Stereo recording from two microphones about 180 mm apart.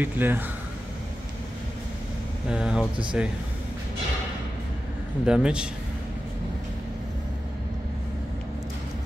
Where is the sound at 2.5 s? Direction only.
5° right (ahead or behind).